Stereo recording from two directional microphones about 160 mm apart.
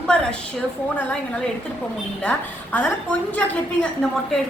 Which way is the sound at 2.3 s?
10° left (ahead or behind).